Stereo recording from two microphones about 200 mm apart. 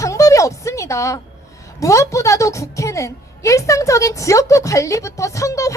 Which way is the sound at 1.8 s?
15° left (ahead or behind).